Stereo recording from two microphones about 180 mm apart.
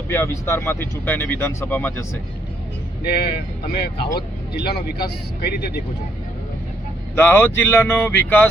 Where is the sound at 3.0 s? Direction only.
60° left (ahead or behind).